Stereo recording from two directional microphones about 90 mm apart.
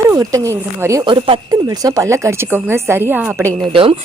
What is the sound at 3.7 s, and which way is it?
Speech, 80° right.